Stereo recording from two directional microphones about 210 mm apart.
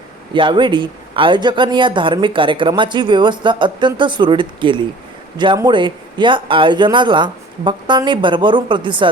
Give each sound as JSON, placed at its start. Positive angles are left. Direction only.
{"t": 0.3, "sound": "speech", "side_deg": -25}